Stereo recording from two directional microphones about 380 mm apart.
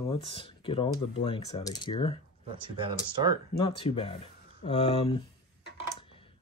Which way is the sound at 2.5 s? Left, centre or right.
Centre.